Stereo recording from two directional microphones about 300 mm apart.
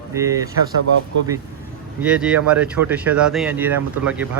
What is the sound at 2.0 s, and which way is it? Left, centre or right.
Speech, centre.